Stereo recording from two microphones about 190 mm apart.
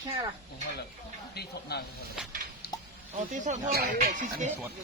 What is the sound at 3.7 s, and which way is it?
Speech, 50° right (ahead or behind).